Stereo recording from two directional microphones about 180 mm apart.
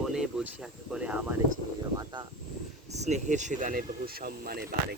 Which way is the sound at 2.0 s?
20° right (ahead or behind).